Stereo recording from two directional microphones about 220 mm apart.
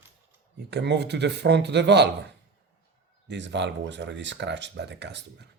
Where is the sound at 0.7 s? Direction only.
50° right (ahead or behind).